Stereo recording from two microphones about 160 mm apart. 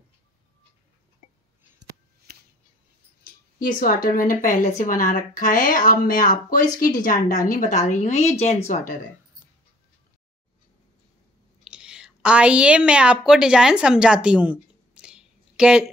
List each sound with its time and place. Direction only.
3.6 s a woman's voice: 60° left (ahead or behind); by 8.9 s 45° left (ahead or behind)
11.6 s a woman's voice: 5° right (ahead or behind)